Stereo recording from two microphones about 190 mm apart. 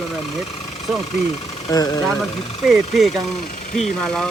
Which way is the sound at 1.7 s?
20° left (ahead or behind).